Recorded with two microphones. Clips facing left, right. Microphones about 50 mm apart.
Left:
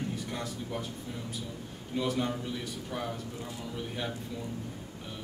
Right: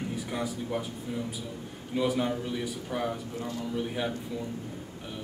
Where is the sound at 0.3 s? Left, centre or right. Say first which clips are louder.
Right 4 dB; centre.